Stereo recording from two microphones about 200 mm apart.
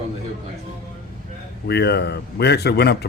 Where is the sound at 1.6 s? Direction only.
55° left (ahead or behind).